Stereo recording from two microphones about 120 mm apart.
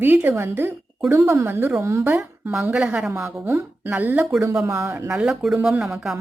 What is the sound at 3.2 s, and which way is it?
A woman's voice, 20° right (ahead or behind).